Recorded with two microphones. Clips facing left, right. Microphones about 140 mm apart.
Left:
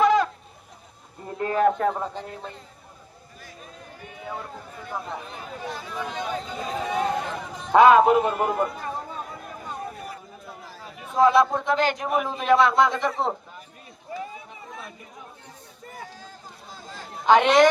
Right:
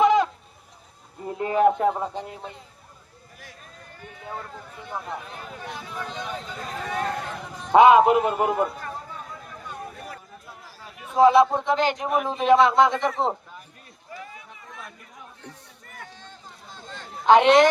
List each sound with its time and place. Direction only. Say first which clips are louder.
0.0 s chicken: right 1 dB; 20° right (ahead or behind)
1.2 s speech: right 2 dB; 15° right (ahead or behind)
3.6 s run: left 4 dB; 5° left (ahead or behind)
4.8 s speech: left 1 dB; 20° right (ahead or behind)
6.0 s speech: left 4 dB; 10° left (ahead or behind)
7.7 s speech: right 1 dB; 20° right (ahead or behind)
11.2 s speech: right 2 dB; 15° right (ahead or behind)
11.9 s a man's voice: right 1 dB; 5° left (ahead or behind)
12.3 s speech: right 2 dB; 25° right (ahead or behind)
16.7 s a sound: even; 5° left (ahead or behind)